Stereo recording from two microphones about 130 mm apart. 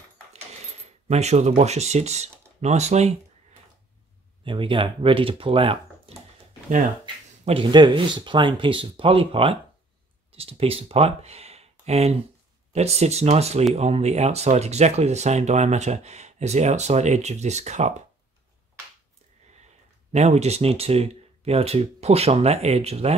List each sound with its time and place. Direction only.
0.8 s speech: 55° right (ahead or behind)
4.5 s speech: 40° right (ahead or behind)
7.4 s speech: 40° right (ahead or behind); by 17.9 s 60° right (ahead or behind)
20.1 s speech: 60° right (ahead or behind)